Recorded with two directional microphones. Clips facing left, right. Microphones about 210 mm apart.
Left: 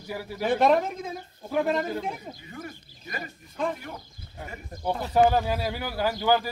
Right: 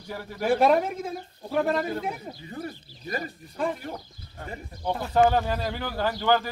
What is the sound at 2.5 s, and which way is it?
Speech, 35° right (ahead or behind).